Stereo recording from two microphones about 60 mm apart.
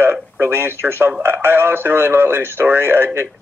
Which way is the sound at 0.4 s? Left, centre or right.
Right.